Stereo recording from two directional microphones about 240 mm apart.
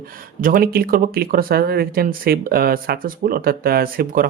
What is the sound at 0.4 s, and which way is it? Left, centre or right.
Speech, right.